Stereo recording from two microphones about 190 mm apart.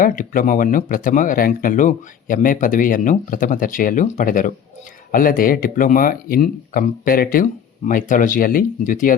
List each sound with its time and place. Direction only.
0.0 s speech: 45° left (ahead or behind)